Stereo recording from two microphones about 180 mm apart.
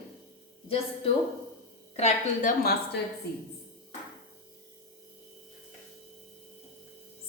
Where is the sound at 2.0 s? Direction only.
45° left (ahead or behind).